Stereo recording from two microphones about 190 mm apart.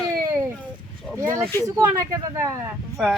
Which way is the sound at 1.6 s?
20° right (ahead or behind).